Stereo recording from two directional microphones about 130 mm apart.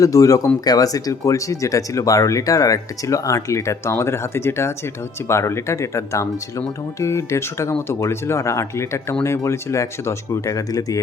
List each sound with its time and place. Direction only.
0.0 s speech: 25° left (ahead or behind)